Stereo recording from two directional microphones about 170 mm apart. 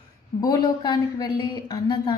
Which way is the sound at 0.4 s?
25° left (ahead or behind).